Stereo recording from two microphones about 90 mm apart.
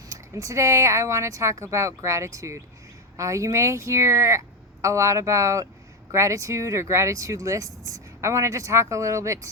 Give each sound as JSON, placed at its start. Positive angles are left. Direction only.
{"t": 0.1, "sound": "speech", "side_deg": -35}